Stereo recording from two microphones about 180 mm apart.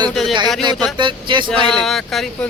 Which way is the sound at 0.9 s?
25° right (ahead or behind).